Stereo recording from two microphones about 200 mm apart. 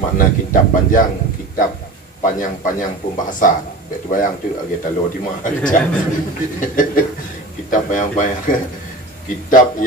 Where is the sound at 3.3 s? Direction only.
40° left (ahead or behind).